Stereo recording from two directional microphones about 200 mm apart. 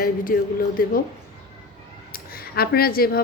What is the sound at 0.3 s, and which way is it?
Speech, 45° left (ahead or behind).